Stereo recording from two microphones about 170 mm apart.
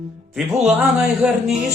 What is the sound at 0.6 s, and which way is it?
Speech, 5° right (ahead or behind).